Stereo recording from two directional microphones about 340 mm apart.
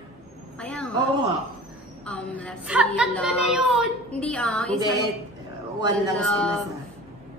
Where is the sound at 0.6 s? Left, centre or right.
Centre.